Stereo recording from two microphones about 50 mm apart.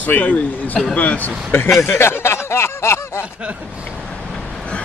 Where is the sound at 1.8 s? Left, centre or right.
Left.